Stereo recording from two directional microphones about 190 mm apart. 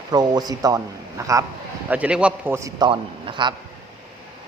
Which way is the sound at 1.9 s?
5° right (ahead or behind).